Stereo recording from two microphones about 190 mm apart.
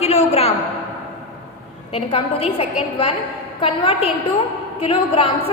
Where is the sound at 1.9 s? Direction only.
30° left (ahead or behind).